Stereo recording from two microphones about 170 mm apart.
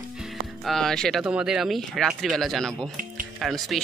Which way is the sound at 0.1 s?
Centre (ahead or behind).